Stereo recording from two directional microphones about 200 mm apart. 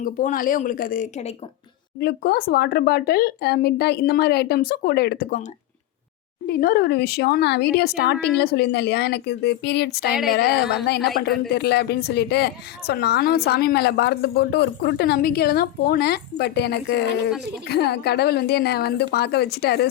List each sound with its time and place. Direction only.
0.0 s speech: 40° left (ahead or behind)
2.0 s speech: 50° left (ahead or behind)
6.5 s speech: 50° left (ahead or behind)